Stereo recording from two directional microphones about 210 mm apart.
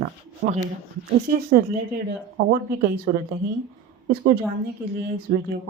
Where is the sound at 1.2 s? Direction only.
45° right (ahead or behind).